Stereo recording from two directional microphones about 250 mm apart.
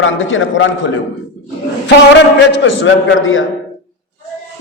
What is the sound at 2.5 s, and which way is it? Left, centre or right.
Speech, left.